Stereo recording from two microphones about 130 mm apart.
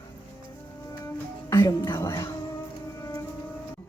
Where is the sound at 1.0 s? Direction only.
25° left (ahead or behind).